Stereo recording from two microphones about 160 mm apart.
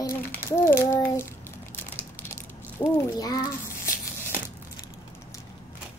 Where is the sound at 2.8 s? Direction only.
25° left (ahead or behind).